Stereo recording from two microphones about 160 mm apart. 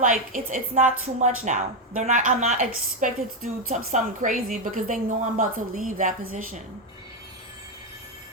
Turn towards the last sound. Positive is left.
turn(degrees=-55)  # may be behind; listen again after turning